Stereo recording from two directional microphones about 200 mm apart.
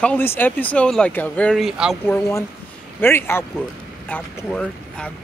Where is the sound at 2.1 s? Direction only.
15° left (ahead or behind).